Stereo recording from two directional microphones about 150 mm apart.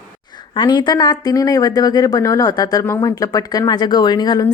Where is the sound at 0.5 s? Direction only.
30° left (ahead or behind).